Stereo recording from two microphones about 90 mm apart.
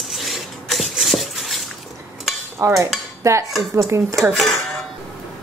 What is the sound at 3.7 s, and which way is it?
Speech, 35° right (ahead or behind).